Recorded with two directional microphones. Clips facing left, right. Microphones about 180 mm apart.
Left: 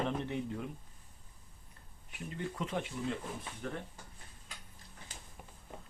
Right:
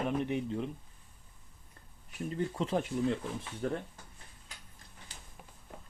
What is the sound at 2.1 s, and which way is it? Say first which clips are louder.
Speech: right 6 dB; 35° right (ahead or behind).